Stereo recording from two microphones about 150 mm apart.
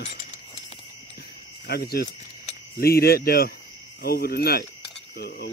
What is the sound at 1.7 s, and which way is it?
Speech, 90° left.